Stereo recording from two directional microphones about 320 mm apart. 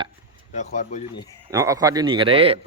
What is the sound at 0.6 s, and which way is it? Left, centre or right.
Speech, left.